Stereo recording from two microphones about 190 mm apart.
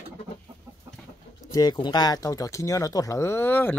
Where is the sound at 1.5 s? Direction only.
20° left (ahead or behind).